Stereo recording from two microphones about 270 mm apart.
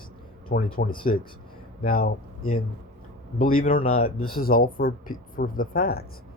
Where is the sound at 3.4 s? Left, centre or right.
Left.